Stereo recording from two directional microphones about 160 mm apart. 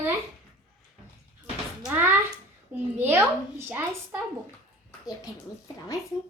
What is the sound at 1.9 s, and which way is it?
A woman's voice, 15° right (ahead or behind).